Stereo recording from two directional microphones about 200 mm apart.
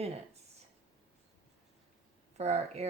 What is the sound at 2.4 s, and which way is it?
Speech, 30° right (ahead or behind).